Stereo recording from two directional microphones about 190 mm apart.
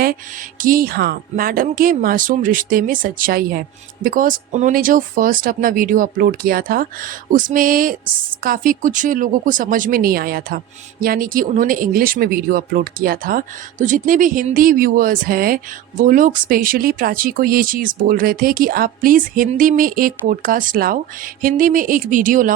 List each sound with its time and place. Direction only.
0.6 s speech: 50° right (ahead or behind)